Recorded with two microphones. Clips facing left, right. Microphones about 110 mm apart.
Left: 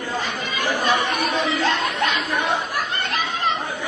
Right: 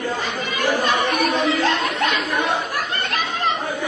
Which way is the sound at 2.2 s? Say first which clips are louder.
Right 1 dB; 15° right (ahead or behind).